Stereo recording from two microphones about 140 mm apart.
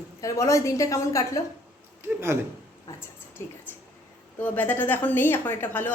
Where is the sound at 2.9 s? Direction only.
25° left (ahead or behind).